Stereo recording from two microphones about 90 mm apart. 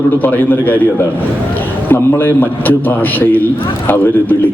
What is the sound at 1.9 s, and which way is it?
A man's voice, 20° left (ahead or behind).